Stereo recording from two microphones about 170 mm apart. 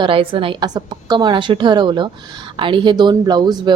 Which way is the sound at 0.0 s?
30° right (ahead or behind).